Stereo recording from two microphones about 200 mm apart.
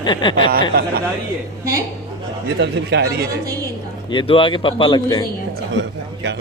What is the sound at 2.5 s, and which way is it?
Speech, 60° right (ahead or behind).